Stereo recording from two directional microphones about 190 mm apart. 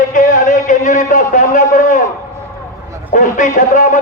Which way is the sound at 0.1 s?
45° left (ahead or behind).